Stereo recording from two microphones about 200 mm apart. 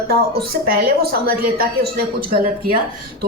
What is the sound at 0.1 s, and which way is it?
Speech, 50° right (ahead or behind).